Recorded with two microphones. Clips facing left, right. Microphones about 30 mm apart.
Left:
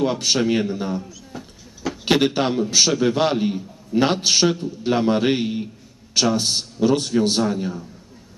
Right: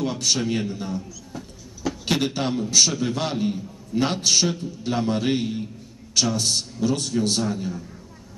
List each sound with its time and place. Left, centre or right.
0.0 s a man's voice: left
1.3 s train: centre
2.0 s a man's voice: left